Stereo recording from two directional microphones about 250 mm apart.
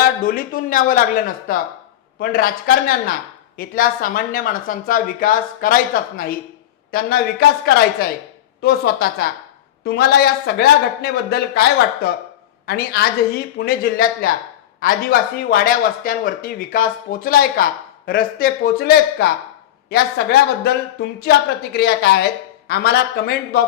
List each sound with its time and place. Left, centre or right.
0.0 s speech: left